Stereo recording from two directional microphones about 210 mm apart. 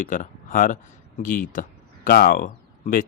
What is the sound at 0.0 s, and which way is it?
A man's voice, 40° left (ahead or behind).